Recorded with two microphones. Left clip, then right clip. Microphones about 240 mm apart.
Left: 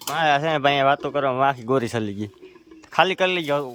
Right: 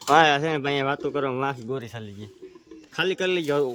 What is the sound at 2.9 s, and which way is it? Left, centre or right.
Speech, centre.